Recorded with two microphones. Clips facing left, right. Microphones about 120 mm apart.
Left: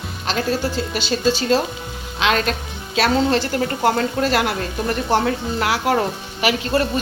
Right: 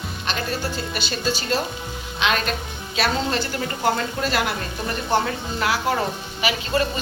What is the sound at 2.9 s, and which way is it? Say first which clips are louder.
Speech: left 6 dB; 90° left.